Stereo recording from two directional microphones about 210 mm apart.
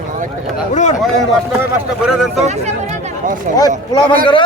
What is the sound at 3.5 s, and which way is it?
Speech, 20° left (ahead or behind).